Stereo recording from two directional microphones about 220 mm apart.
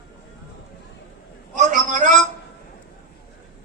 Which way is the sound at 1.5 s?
35° right (ahead or behind).